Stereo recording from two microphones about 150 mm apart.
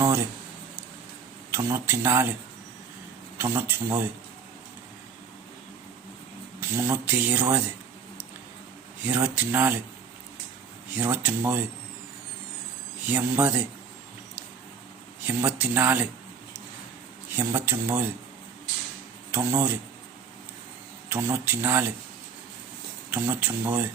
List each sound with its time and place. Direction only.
1.5 s speech: 15° right (ahead or behind)
3.3 s speech: 15° right (ahead or behind)
6.6 s speech: 15° right (ahead or behind)
9.0 s speech: 10° right (ahead or behind)
11.0 s speech: 10° right (ahead or behind)
13.1 s speech: 10° right (ahead or behind)
15.2 s speech: 10° right (ahead or behind)
17.3 s speech: 15° right (ahead or behind)
19.3 s speech: 15° right (ahead or behind)
21.1 s speech: 15° right (ahead or behind)
23.1 s speech: 10° right (ahead or behind)